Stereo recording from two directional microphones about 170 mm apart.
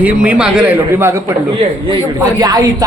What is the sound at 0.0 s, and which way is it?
A man's voice, 10° right (ahead or behind).